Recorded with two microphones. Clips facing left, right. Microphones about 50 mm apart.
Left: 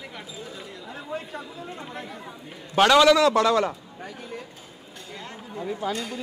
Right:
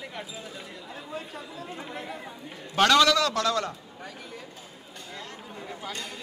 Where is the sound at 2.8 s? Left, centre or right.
Centre.